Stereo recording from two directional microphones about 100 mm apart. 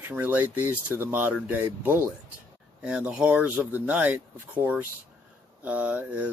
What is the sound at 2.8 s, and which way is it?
Speech, 10° right (ahead or behind).